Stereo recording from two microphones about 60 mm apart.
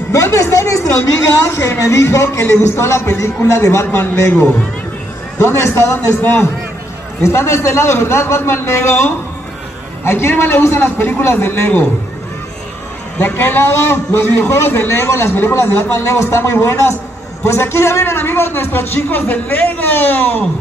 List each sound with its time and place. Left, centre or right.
0.1 s a man's voice: left
5.4 s a man's voice: left
13.2 s a man's voice: left